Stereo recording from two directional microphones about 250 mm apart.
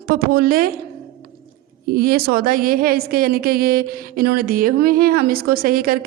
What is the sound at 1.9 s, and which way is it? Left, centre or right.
A woman's voice, right.